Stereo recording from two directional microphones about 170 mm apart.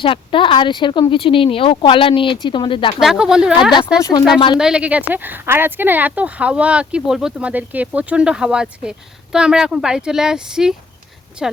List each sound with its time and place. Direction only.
0.0 s speech: 30° left (ahead or behind)
3.0 s speech: 5° right (ahead or behind)